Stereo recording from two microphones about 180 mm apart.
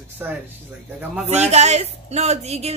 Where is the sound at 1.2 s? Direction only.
40° right (ahead or behind).